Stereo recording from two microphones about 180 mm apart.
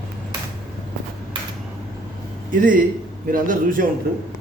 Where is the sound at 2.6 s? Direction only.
50° right (ahead or behind).